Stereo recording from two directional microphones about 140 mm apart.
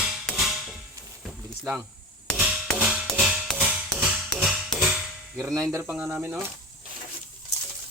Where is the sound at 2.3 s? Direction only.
5° right (ahead or behind).